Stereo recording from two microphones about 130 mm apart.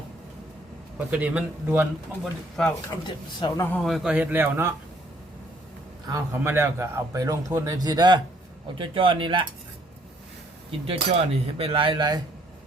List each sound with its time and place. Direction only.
0.9 s speech: 10° right (ahead or behind)
2.2 s speech: 5° left (ahead or behind)
3.4 s a man's voice: 35° left (ahead or behind)
3.8 s speech: centre (ahead or behind); by 4.7 s 15° right (ahead or behind)
6.3 s speech: 20° right (ahead or behind); by 9.5 s 40° right (ahead or behind)
10.7 s speech: 45° right (ahead or behind)